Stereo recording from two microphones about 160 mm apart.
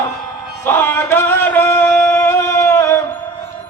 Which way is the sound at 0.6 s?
15° left (ahead or behind).